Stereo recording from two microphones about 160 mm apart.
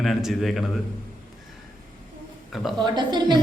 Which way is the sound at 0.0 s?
Centre (ahead or behind).